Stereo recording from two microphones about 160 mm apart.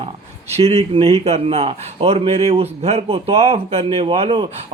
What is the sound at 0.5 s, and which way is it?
Speech, 40° right (ahead or behind).